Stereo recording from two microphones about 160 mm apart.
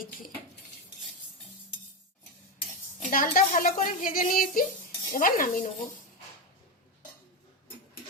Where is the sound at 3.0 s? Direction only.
60° left (ahead or behind).